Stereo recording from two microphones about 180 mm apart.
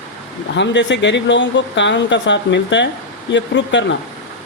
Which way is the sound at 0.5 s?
80° left.